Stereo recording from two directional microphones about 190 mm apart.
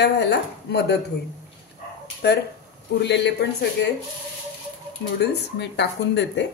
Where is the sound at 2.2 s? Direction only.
60° left (ahead or behind).